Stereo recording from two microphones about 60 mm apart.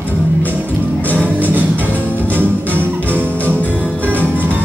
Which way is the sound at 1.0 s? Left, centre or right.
Left.